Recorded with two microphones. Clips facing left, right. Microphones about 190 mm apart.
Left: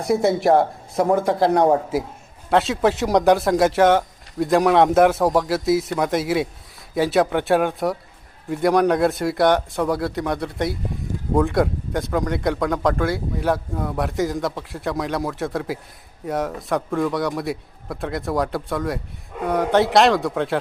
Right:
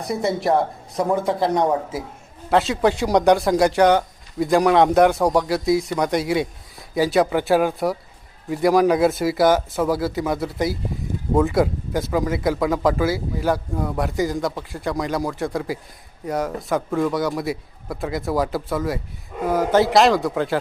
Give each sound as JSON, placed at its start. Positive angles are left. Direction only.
{"t": 0.2, "sound": "a man's voice", "side_deg": 0}
{"t": 0.5, "sound": "speech", "side_deg": 25}
{"t": 2.5, "sound": "a man's voice", "side_deg": 0}